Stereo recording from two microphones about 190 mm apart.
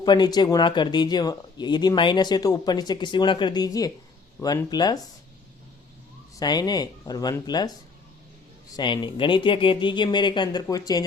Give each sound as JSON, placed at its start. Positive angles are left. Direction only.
{"t": 0.0, "sound": "speech", "side_deg": 20}
{"t": 6.4, "sound": "speech", "side_deg": 20}